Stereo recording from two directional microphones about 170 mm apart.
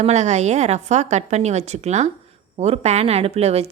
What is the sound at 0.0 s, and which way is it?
A woman's voice, 40° right (ahead or behind).